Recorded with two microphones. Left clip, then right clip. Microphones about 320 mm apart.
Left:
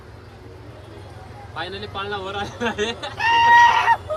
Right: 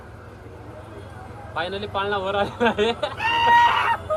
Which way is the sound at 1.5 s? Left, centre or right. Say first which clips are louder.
Right 3 dB; centre.